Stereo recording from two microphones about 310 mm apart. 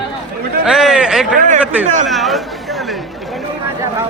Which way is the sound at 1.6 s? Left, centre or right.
Centre.